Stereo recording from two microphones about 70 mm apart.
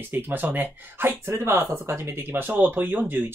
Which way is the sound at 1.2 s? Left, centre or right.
Right.